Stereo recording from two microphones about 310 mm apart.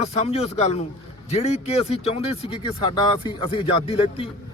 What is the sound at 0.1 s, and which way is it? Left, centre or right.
Speech, centre.